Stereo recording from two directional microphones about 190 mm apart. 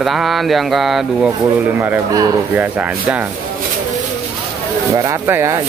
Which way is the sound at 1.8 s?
10° right (ahead or behind).